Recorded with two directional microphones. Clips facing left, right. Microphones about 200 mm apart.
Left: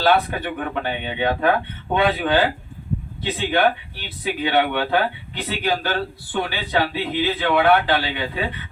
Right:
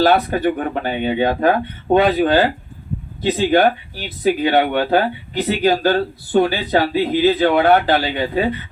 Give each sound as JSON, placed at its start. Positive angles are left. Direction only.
{"t": 0.1, "sound": "speech", "side_deg": -40}